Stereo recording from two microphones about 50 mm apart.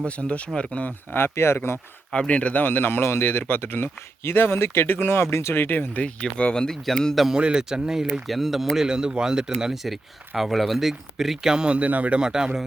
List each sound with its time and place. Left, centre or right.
0.2 s speech: left
0.9 s speech: left
2.1 s speech: left
5.6 s speech: left
5.9 s a man's voice: left
7.3 s speech: centre
8.3 s speech: centre
11.8 s speech: right
12.2 s speech: centre